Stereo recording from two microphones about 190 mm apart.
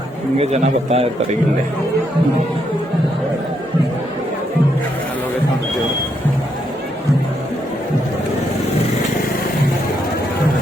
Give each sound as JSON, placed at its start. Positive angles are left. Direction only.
{"t": 0.3, "sound": "a man's voice", "side_deg": -35}